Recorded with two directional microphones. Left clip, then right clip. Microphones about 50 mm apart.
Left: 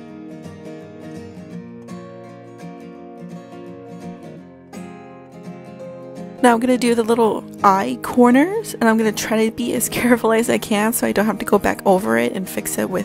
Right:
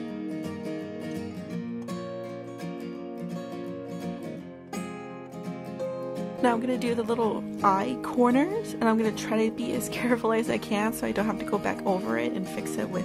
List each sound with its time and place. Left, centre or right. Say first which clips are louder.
6.4 s speech: left 11 dB; left